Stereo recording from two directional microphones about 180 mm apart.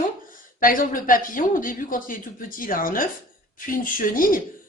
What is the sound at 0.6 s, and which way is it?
Speech, 50° left (ahead or behind).